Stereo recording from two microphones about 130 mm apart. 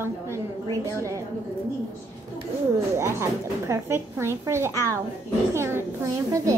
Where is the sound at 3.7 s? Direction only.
20° right (ahead or behind).